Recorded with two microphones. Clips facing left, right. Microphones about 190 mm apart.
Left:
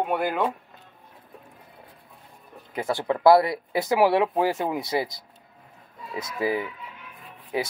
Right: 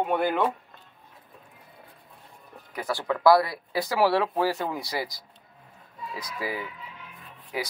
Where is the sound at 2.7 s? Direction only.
25° left (ahead or behind).